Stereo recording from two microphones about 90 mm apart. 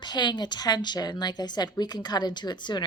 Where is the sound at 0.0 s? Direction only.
55° left (ahead or behind).